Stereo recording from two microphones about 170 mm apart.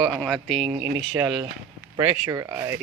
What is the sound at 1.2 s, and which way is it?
Speech, 20° right (ahead or behind).